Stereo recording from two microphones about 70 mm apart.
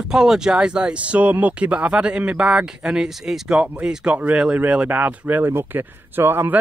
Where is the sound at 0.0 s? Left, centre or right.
Centre.